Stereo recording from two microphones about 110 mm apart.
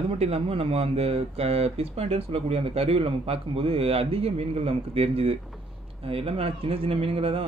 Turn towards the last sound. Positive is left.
turn(degrees=-60)  # may be behind; listen again after turning